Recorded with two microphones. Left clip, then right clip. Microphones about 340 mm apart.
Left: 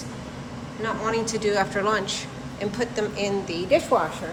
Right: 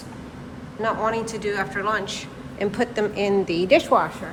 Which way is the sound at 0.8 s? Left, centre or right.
Centre.